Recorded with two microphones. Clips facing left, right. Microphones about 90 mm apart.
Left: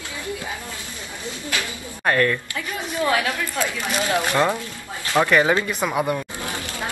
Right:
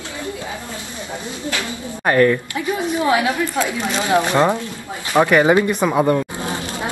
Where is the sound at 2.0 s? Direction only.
15° right (ahead or behind).